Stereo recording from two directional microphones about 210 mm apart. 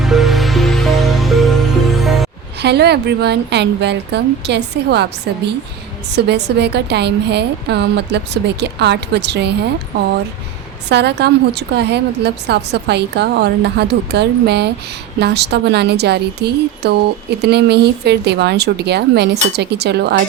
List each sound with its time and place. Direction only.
0.0 s music: centre (ahead or behind)
2.6 s speech: 50° right (ahead or behind)
10.8 s speech: 55° right (ahead or behind)